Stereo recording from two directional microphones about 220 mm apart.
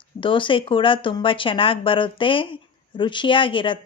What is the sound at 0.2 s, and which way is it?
Speech, 20° left (ahead or behind).